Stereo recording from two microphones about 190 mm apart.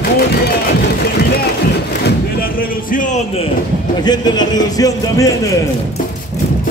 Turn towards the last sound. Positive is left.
turn(degrees=20)  # may be behind; listen again after turning